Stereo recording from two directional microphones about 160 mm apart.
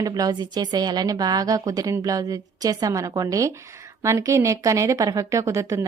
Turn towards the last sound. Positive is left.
turn(degrees=-20)  # may be behind; listen again after turning